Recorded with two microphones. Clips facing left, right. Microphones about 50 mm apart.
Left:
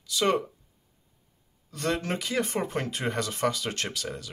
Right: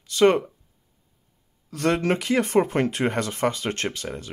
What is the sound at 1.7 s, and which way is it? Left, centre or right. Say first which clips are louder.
Speech: right 7 dB; right.